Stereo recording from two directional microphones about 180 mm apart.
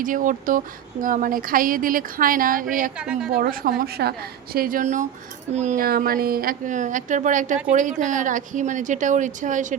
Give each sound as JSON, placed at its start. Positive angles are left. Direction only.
{"t": 0.0, "sound": "a woman's voice", "side_deg": -45}
{"t": 3.0, "sound": "a woman's voice", "side_deg": -5}
{"t": 3.3, "sound": "a woman's voice", "side_deg": -55}